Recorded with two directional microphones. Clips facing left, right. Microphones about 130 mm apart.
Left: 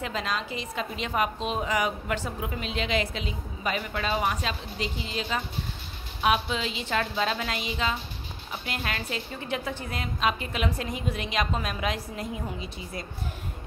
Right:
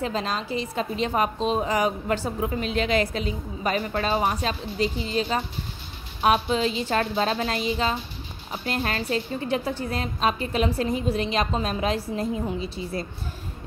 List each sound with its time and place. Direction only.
0.0 s a woman's voice: 35° right (ahead or behind)